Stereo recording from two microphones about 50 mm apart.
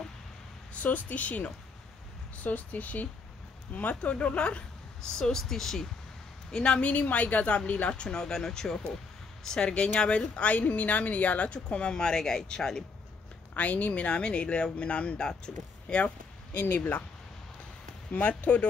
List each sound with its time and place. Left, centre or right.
0.8 s speech: left
5.1 s speech: centre
6.8 s speech: left
7.9 s speech: centre
11.9 s speech: centre
13.6 s speech: left
16.5 s speech: left
18.1 s speech: left